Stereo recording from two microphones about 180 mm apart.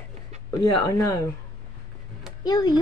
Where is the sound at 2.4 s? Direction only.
20° left (ahead or behind).